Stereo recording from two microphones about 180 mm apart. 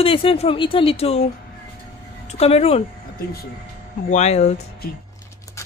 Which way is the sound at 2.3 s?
35° left (ahead or behind).